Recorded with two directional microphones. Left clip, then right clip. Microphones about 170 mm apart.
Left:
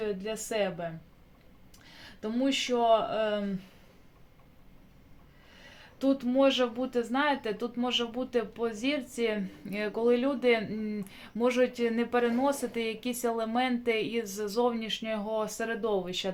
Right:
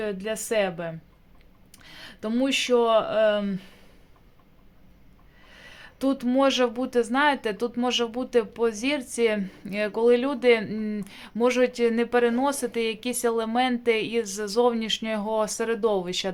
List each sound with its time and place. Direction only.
0.0 s speech: 45° right (ahead or behind)
5.5 s speech: 40° right (ahead or behind)